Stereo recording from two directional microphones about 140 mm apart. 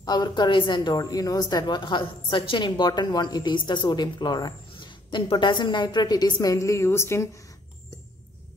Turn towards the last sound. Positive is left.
turn(degrees=25)  # may be behind; listen again after turning